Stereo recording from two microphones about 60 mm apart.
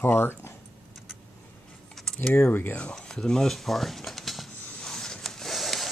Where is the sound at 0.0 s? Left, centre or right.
Left.